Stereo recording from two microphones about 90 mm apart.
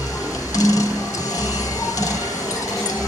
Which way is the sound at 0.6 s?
40° left (ahead or behind).